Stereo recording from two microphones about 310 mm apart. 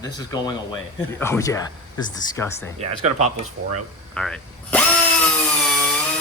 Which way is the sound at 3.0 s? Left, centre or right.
Right.